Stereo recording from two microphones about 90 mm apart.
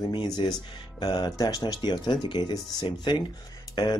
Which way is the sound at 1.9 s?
60° left (ahead or behind).